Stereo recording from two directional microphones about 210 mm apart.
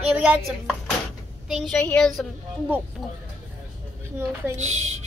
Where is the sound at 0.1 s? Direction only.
5° right (ahead or behind).